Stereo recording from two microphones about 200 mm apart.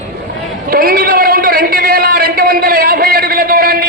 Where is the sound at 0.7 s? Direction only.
45° right (ahead or behind).